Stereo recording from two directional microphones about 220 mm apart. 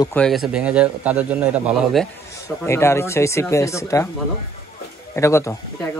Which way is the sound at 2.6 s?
10° left (ahead or behind).